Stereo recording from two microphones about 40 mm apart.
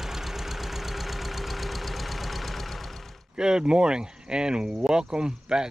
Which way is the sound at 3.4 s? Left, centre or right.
Centre.